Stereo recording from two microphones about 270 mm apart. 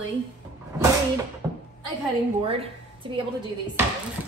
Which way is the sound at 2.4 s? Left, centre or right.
Right.